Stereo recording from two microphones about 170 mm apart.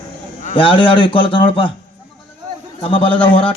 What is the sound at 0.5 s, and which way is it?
A man's voice, 30° left (ahead or behind).